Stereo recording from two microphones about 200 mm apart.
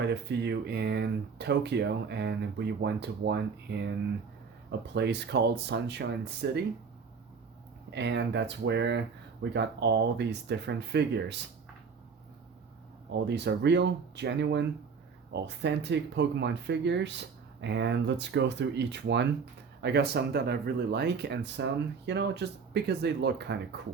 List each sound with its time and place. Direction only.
0.0 s speech: 60° right (ahead or behind)
4.9 s speech: 55° right (ahead or behind)
7.9 s speech: 60° right (ahead or behind)
13.1 s speech: 60° right (ahead or behind)